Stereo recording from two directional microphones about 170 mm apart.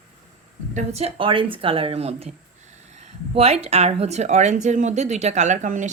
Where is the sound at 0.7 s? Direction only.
40° right (ahead or behind).